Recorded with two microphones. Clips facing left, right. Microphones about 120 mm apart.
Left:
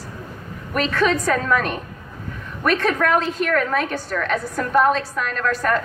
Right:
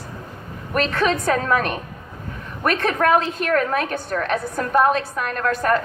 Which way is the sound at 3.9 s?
55° right (ahead or behind).